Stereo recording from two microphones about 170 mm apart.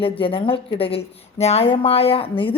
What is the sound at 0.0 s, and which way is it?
A woman's voice, 30° left (ahead or behind).